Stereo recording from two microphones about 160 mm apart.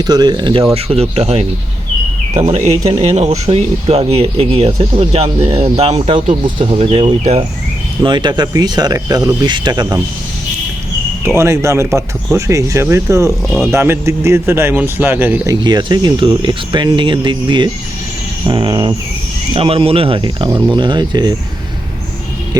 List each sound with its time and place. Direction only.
0.0 s speech: 25° right (ahead or behind)
0.7 s speech: 40° right (ahead or behind)
8.0 s speech: 30° right (ahead or behind)
11.3 s speech: 15° right (ahead or behind)
13.5 s speech: centre (ahead or behind)
13.7 s speech: 15° right (ahead or behind)
15.6 s speech: 25° right (ahead or behind)